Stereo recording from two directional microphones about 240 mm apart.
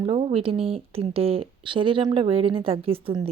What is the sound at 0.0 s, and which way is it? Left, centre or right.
Speech, right.